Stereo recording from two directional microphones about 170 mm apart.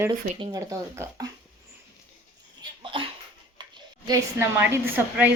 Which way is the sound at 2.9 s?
30° right (ahead or behind).